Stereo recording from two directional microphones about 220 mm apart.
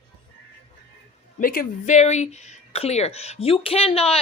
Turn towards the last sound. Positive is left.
turn(degrees=25)  # may be behind; listen again after turning